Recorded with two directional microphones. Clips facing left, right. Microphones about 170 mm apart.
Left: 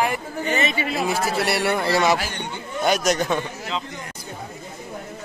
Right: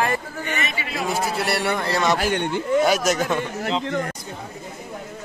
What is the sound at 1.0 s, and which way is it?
A man's voice, centre (ahead or behind).